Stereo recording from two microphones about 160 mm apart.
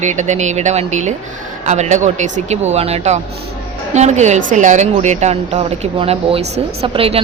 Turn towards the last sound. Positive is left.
turn(degrees=-35)  # may be behind; listen again after turning